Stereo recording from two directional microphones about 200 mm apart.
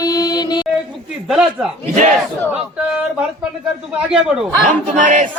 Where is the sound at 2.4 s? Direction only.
5° right (ahead or behind).